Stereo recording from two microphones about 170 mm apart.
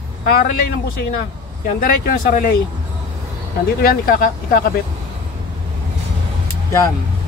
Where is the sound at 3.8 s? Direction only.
60° left (ahead or behind).